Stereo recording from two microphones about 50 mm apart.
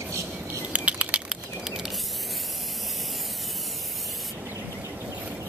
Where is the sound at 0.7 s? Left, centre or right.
Right.